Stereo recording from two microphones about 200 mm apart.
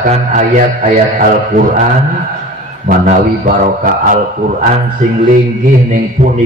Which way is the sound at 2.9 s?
45° right (ahead or behind).